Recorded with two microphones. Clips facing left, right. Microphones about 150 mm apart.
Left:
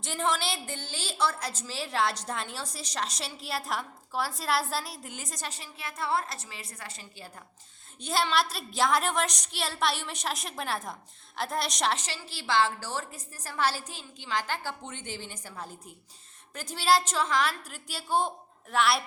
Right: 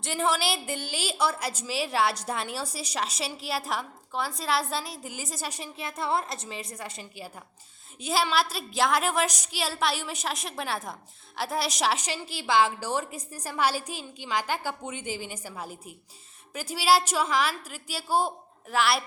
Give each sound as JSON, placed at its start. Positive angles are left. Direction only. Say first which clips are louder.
{"t": 0.0, "sound": "a woman's voice", "louder": "right 3 dB", "side_deg": -5}
{"t": 5.5, "sound": "a woman's voice", "louder": "right 4 dB", "side_deg": -20}
{"t": 8.0, "sound": "a woman's voice", "louder": "right 2 dB", "side_deg": -5}